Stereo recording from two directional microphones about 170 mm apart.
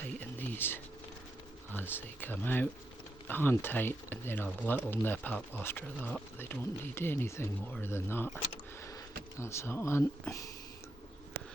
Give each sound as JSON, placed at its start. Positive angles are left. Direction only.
{"t": 0.2, "sound": "a sound", "side_deg": 10}
{"t": 1.7, "sound": "speech", "side_deg": 10}
{"t": 9.4, "sound": "speech", "side_deg": 15}